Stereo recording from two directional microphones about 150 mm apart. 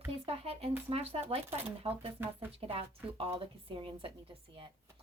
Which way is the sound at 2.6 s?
40° right (ahead or behind).